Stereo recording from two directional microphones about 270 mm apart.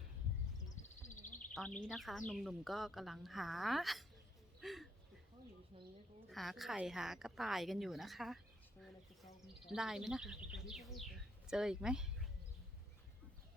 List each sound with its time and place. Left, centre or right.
0.8 s bird: left
1.9 s a woman's voice: centre
4.6 s a sound: centre
6.3 s a woman's voice: centre
9.6 s speech: centre